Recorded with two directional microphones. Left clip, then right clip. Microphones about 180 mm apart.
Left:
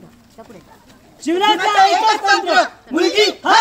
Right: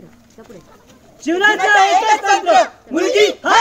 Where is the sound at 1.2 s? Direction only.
15° left (ahead or behind).